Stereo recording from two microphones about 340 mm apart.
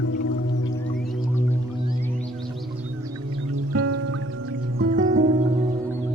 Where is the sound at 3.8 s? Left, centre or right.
Right.